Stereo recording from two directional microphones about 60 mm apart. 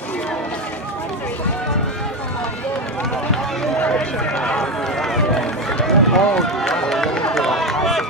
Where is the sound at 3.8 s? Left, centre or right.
Centre.